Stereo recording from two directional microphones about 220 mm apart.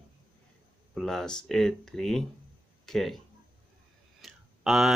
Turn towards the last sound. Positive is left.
turn(degrees=0)  # may be behind; listen again after turning